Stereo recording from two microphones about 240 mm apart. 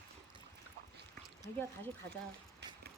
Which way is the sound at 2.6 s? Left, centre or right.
Right.